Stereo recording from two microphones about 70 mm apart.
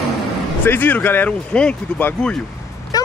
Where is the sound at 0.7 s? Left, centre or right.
Left.